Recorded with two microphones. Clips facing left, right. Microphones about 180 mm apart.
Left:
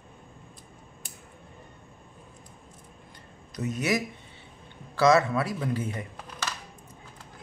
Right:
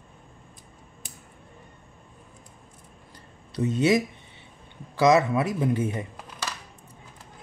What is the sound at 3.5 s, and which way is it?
A man's voice, 30° right (ahead or behind).